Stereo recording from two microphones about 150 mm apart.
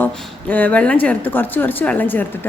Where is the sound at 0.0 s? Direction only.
10° left (ahead or behind).